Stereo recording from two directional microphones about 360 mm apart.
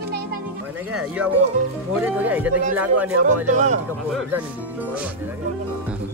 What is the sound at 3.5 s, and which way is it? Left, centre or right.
Speech, centre.